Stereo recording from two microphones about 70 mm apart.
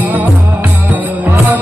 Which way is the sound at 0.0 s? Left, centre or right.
Right.